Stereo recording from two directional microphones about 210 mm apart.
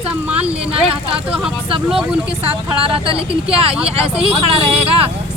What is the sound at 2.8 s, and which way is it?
Speech, 25° right (ahead or behind).